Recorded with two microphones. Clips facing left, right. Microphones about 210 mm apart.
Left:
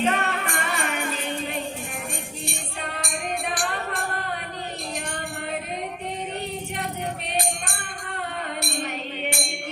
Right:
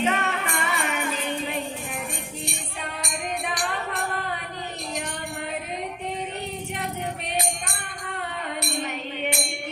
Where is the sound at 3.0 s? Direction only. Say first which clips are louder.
Left 1 dB; 50° left (ahead or behind).